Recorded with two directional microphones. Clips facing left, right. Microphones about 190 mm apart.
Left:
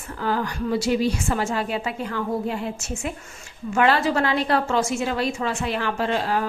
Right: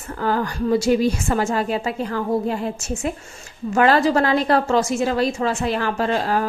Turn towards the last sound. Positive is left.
turn(degrees=-40)  # may be behind; listen again after turning